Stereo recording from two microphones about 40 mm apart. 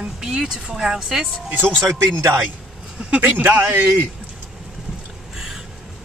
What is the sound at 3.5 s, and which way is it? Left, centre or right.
Speech, right.